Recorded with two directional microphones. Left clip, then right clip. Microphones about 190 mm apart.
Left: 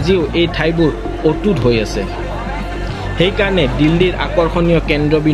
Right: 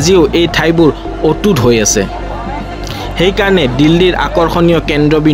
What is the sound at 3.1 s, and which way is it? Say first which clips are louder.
Speech: right 4 dB; 60° right (ahead or behind).